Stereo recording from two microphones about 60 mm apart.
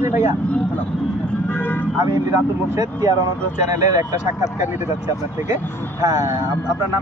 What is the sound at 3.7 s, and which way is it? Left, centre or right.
Speech, right.